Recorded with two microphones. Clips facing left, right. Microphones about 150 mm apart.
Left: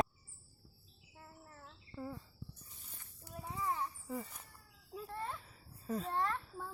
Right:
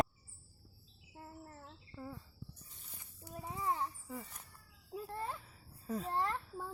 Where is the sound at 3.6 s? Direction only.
30° right (ahead or behind).